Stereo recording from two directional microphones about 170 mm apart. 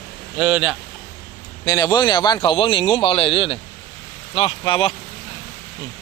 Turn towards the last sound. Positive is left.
turn(degrees=30)  # may be behind; listen again after turning